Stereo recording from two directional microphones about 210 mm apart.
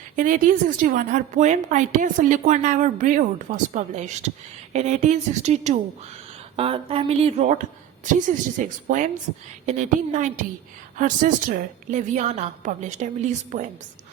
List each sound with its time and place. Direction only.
0.2 s a woman's voice: 40° right (ahead or behind)